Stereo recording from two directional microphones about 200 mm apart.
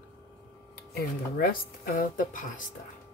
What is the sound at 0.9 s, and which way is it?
Speech, 45° left (ahead or behind).